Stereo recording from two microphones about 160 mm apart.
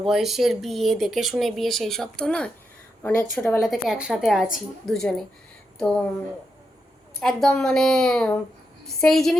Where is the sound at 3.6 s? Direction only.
Centre (ahead or behind).